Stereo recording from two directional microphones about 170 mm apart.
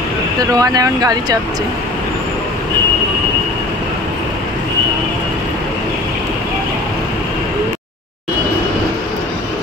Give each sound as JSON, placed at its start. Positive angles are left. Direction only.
{"t": 0.4, "sound": "speech", "side_deg": -20}